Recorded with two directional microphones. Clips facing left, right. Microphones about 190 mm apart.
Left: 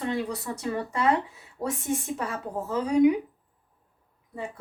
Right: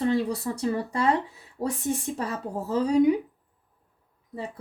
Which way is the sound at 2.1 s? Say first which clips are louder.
Right 1 dB; 35° right (ahead or behind).